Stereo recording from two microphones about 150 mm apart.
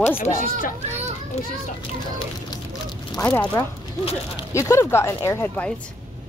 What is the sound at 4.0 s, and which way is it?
Speech, 40° left (ahead or behind).